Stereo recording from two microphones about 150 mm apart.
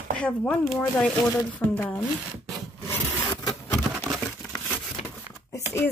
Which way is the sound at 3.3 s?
25° left (ahead or behind).